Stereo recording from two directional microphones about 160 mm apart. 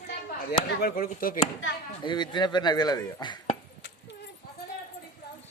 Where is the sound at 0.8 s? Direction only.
65° left (ahead or behind).